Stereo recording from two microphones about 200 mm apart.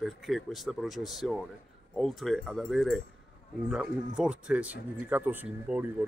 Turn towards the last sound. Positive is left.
turn(degrees=-5)  # may be behind; listen again after turning